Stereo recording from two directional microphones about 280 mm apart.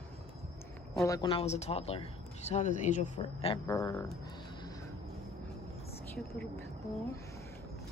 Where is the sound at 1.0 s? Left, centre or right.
Centre.